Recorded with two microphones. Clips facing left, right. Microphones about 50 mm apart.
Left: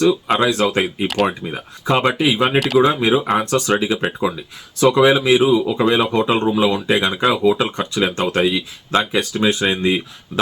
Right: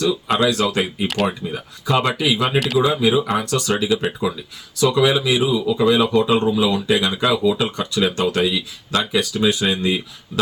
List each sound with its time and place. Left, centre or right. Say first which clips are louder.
0.0 s speech: left 3 dB; left
1.0 s speech: left 2 dB; centre
1.3 s speech: left 1 dB; left